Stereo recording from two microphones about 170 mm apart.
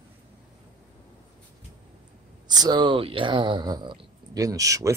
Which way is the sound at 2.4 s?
25° right (ahead or behind).